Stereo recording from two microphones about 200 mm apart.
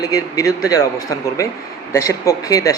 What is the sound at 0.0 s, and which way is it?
Speech, 15° left (ahead or behind).